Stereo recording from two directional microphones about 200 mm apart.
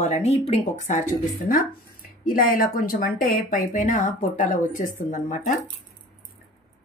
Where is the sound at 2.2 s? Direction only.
45° left (ahead or behind).